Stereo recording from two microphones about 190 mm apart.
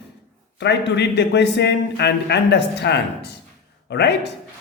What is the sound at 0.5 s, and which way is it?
A man's voice, 65° left (ahead or behind).